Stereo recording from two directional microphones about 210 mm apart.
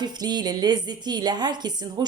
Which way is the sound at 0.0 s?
20° right (ahead or behind).